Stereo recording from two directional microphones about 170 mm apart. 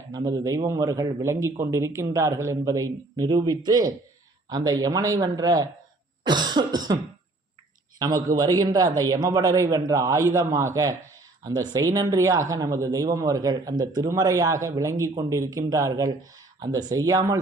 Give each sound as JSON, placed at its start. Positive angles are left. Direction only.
{"t": 0.1, "sound": "speech", "side_deg": -20}